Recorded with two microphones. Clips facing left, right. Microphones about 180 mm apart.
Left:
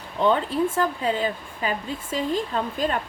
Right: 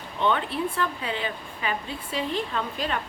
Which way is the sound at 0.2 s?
35° left (ahead or behind).